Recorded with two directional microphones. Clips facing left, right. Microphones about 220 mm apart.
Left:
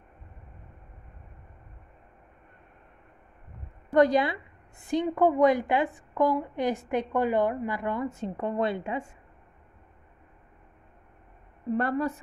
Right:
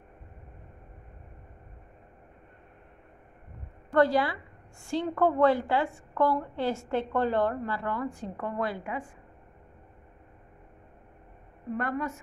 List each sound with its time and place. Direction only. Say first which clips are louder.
3.9 s a woman's voice: left 2 dB; 20° left (ahead or behind)
11.7 s a woman's voice: left 4 dB; 35° left (ahead or behind)